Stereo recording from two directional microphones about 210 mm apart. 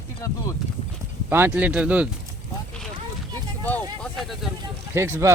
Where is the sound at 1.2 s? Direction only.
10° right (ahead or behind).